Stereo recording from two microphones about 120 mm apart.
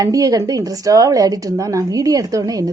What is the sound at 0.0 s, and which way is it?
A woman's voice, 30° right (ahead or behind).